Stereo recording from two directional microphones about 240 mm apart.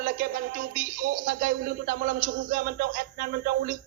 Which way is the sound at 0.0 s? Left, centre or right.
Right.